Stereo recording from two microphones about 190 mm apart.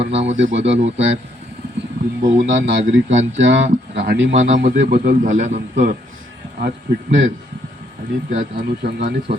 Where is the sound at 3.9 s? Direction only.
55° right (ahead or behind).